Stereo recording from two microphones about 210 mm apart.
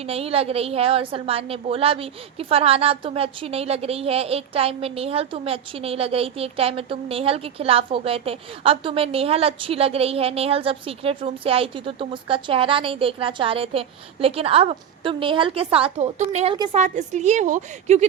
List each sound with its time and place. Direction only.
0.0 s a woman's voice: 30° right (ahead or behind)